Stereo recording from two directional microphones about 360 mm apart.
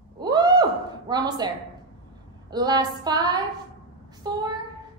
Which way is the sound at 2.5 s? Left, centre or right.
Centre.